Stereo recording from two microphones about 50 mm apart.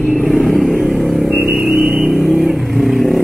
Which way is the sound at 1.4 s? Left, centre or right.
Centre.